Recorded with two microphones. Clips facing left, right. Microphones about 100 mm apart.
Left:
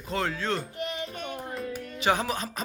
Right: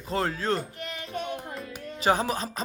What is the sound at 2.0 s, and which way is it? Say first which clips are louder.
Music: right 2 dB; 35° right (ahead or behind).